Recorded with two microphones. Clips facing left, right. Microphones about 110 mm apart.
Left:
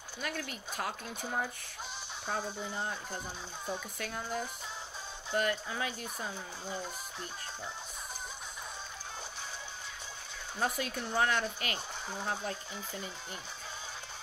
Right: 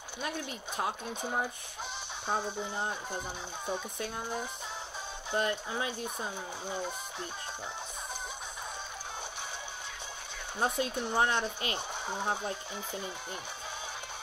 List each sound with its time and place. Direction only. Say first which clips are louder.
0.2 s speech: right 2 dB; 20° right (ahead or behind)
10.6 s speech: right 3 dB; 25° right (ahead or behind)